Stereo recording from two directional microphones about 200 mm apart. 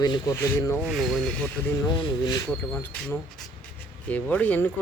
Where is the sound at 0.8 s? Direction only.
Centre (ahead or behind).